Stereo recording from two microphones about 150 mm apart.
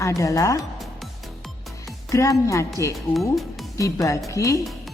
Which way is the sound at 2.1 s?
20° left (ahead or behind).